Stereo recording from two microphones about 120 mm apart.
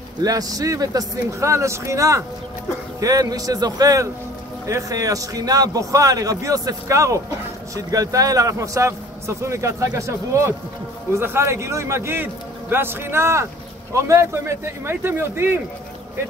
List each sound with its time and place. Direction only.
0.2 s a man's voice: 30° right (ahead or behind)